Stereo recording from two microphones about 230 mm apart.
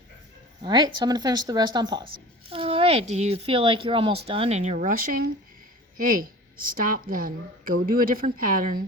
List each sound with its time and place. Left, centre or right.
0.6 s a woman's voice: centre; by 8.8 s right